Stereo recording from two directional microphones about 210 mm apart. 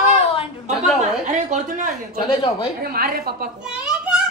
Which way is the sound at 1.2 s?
35° right (ahead or behind).